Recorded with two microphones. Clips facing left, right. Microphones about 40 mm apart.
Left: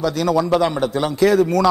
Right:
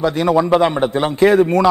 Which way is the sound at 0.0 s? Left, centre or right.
Right.